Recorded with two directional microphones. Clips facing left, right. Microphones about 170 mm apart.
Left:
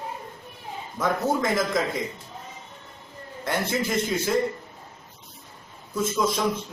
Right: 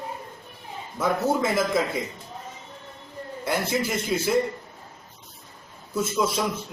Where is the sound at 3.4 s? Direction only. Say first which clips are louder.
Right 1 dB; 10° right (ahead or behind).